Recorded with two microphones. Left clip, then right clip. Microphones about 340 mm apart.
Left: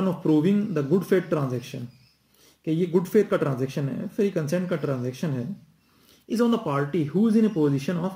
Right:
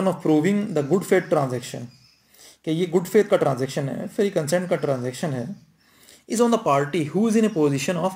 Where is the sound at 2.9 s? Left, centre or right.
Right.